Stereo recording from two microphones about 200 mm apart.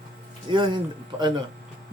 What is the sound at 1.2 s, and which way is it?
Speech, 20° right (ahead or behind).